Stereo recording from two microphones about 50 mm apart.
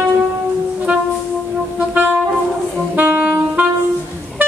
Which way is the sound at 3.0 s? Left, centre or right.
Right.